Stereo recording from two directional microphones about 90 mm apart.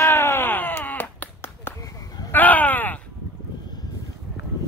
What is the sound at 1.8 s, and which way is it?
Sheep, 40° left (ahead or behind).